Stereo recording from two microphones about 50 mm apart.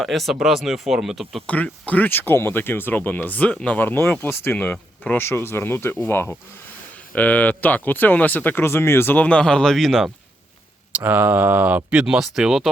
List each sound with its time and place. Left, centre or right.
0.0 s speech: centre
1.5 s speech: left
3.8 s speech: left
7.1 s speech: left
8.6 s speech: left
9.1 s speech: left; by 10.1 s centre
10.9 s speech: right
12.0 s speech: centre